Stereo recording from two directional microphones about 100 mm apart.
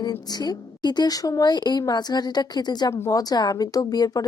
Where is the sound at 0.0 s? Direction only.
45° left (ahead or behind).